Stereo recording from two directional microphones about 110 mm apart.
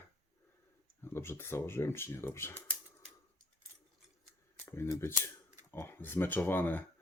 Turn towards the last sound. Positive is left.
turn(degrees=15)  # may be behind; listen again after turning